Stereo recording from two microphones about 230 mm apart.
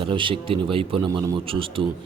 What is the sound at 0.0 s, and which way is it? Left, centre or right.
A man's voice, right.